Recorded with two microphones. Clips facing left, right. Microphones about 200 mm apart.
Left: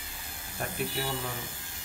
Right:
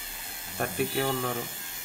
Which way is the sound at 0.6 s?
60° right (ahead or behind).